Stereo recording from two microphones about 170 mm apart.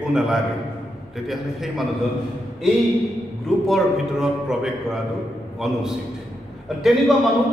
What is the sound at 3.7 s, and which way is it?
A man's voice, centre (ahead or behind).